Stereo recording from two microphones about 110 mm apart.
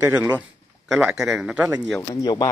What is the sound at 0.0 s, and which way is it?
Speech, 25° right (ahead or behind).